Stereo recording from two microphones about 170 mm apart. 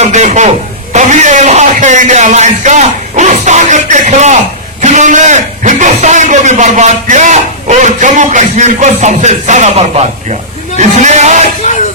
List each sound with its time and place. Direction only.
0.0 s a sound: 45° right (ahead or behind)
0.9 s music: 45° right (ahead or behind)
4.8 s a man's voice: 45° right (ahead or behind)